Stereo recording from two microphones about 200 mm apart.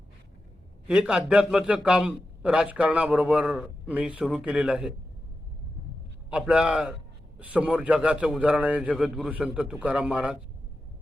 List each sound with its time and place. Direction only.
0.9 s a man's voice: 5° right (ahead or behind)
6.3 s a man's voice: 5° right (ahead or behind)